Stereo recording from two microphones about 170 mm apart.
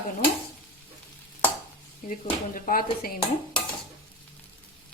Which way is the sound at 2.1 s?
55° left (ahead or behind).